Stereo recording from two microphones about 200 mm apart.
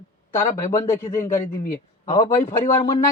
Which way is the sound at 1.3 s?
40° left (ahead or behind).